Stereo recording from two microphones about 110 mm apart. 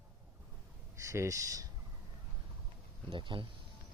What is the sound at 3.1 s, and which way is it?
Speech, 50° right (ahead or behind).